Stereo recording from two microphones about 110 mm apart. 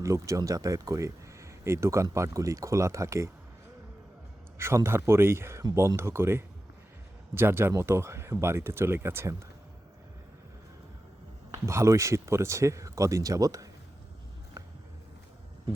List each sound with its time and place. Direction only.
0.0 s speech: 30° right (ahead or behind)
4.5 s speech: 25° right (ahead or behind)
11.5 s speech: 25° right (ahead or behind)
14.6 s a sound: 25° right (ahead or behind)